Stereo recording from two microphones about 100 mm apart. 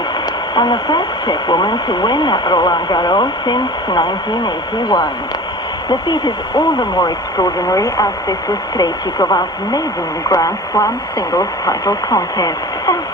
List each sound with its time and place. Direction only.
0.5 s speech: 45° left (ahead or behind)